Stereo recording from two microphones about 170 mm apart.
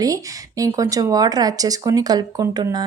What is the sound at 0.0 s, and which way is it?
Speech, 20° right (ahead or behind).